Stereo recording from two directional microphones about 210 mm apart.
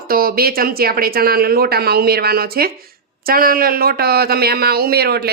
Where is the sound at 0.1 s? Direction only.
45° right (ahead or behind).